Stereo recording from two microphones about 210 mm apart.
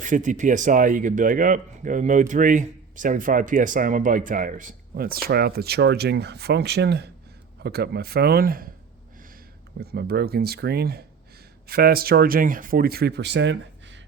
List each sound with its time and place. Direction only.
0.0 s speech: 35° right (ahead or behind)
9.8 s speech: 50° right (ahead or behind)